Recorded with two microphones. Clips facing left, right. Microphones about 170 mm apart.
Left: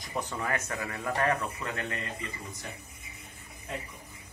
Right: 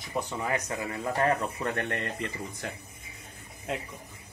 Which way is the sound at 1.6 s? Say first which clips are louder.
Right 5 dB; 60° right (ahead or behind).